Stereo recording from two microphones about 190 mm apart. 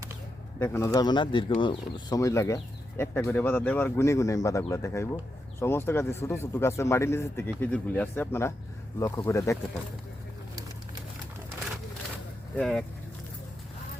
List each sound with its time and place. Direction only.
0.6 s speech: 15° left (ahead or behind)
12.5 s speech: 5° left (ahead or behind)